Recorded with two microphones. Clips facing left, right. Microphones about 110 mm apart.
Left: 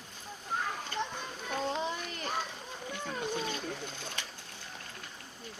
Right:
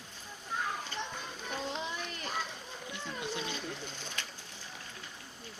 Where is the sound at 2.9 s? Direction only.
50° left (ahead or behind).